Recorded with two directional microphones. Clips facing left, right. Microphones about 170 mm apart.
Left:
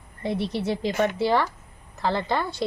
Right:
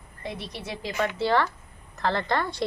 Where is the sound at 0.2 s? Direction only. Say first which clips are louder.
Left 9 dB; 25° left (ahead or behind).